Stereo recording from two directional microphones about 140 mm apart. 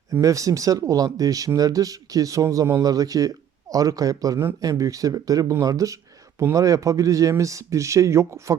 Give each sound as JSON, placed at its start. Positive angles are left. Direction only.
{"t": 0.1, "sound": "speech", "side_deg": -25}